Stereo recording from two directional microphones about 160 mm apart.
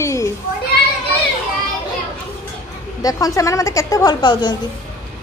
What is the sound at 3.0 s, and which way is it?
A child's voice, 20° left (ahead or behind).